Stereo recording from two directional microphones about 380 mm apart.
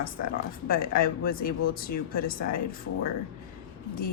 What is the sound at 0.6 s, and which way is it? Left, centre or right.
Speech, left.